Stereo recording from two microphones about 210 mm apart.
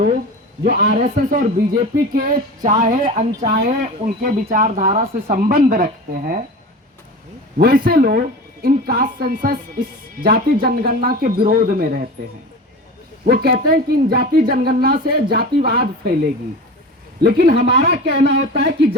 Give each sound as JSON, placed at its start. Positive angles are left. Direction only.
{"t": 0.6, "sound": "speech", "side_deg": -45}
{"t": 7.6, "sound": "speech", "side_deg": -45}
{"t": 13.2, "sound": "speech", "side_deg": -45}
{"t": 17.2, "sound": "speech", "side_deg": -45}